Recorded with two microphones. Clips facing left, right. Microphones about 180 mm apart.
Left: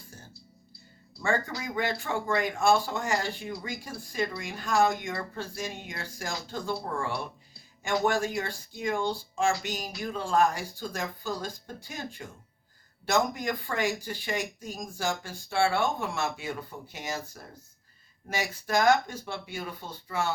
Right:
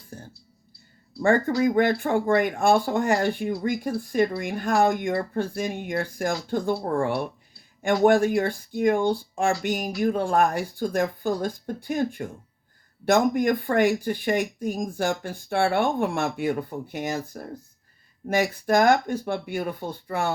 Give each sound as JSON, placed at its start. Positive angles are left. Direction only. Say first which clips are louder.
{"t": 0.1, "sound": "music", "louder": "right 11 dB", "side_deg": -55}
{"t": 1.2, "sound": "speech", "louder": "right 10 dB", "side_deg": -55}